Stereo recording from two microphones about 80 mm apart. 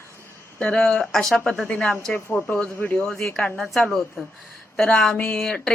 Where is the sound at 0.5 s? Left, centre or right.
Centre.